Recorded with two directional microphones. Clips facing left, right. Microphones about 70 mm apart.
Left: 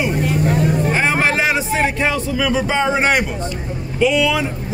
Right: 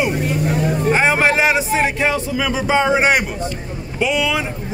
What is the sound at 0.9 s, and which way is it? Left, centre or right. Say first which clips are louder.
Speech: right 2 dB; centre.